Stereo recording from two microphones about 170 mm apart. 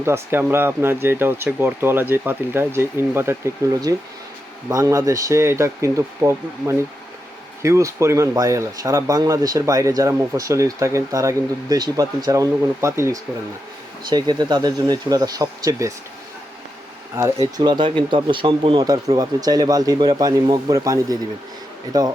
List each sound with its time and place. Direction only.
0.0 s speech: 15° right (ahead or behind)
17.2 s speech: 20° right (ahead or behind)